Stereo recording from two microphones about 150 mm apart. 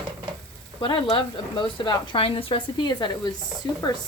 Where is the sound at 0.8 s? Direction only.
35° left (ahead or behind).